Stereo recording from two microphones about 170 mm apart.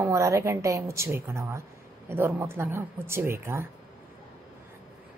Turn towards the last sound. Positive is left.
turn(degrees=-15)  # may be behind; listen again after turning